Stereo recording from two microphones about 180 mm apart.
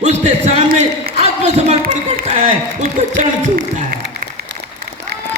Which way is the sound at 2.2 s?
40° right (ahead or behind).